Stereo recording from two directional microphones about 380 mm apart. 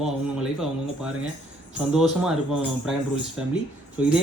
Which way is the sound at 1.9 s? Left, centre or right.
Centre.